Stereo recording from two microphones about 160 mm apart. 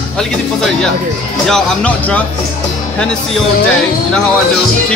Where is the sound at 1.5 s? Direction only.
10° left (ahead or behind).